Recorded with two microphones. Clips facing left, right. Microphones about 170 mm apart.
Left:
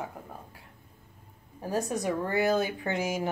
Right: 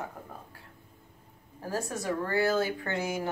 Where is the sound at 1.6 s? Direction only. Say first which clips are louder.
Left 4 dB; 20° left (ahead or behind).